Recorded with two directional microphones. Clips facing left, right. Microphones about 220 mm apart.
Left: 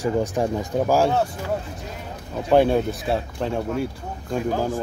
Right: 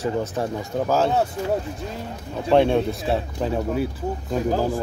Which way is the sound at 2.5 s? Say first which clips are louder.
Even; 5° left (ahead or behind).